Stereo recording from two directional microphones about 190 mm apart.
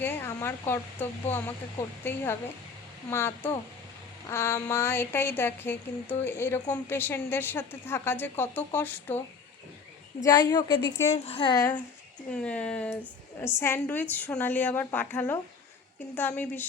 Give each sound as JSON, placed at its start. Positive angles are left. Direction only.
{"t": 0.0, "sound": "a woman's voice", "side_deg": 10}
{"t": 10.2, "sound": "a woman's voice", "side_deg": 20}
{"t": 11.1, "sound": "a woman's voice", "side_deg": 30}
{"t": 12.3, "sound": "a woman's voice", "side_deg": 5}